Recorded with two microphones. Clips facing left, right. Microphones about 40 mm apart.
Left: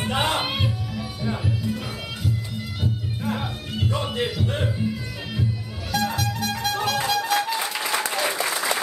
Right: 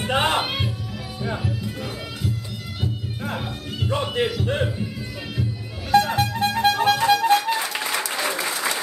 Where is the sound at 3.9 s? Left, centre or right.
Right.